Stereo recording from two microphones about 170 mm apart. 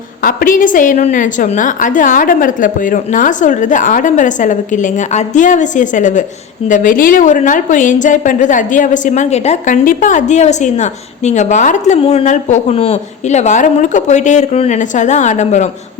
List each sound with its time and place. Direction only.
0.2 s a woman's voice: 55° left (ahead or behind)